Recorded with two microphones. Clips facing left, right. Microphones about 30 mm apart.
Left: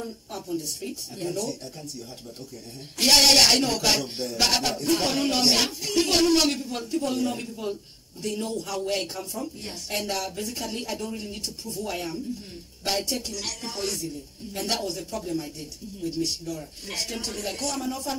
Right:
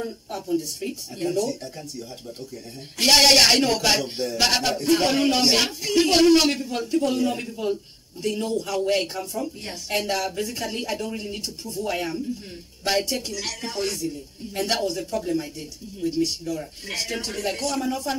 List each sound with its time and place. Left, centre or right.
0.0 s a man's voice: right
3.0 s a man's voice: centre